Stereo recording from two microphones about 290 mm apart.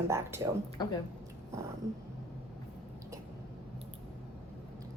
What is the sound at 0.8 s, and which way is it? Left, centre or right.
Speech, centre.